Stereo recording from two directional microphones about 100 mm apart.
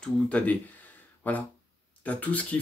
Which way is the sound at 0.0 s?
15° left (ahead or behind).